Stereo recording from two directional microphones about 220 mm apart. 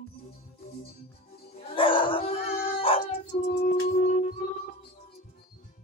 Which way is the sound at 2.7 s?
25° left (ahead or behind).